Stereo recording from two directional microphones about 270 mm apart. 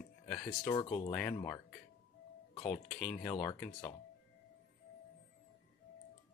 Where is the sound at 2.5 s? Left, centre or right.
Left.